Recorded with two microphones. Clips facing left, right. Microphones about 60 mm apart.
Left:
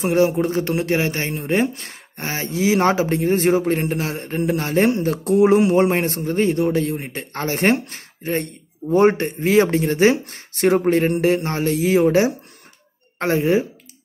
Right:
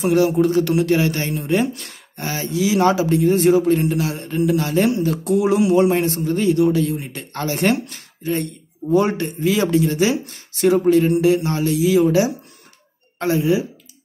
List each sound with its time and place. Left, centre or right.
0.0 s speech: left